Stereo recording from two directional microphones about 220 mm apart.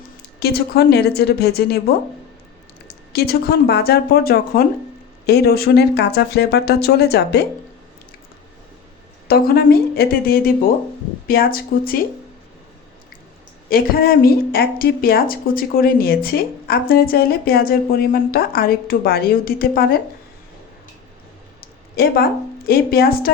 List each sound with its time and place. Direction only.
0.3 s speech: 45° left (ahead or behind)
2.8 s speech: 45° left (ahead or behind)
9.2 s speech: 45° left (ahead or behind)
13.7 s speech: 45° left (ahead or behind)
21.9 s speech: 45° left (ahead or behind)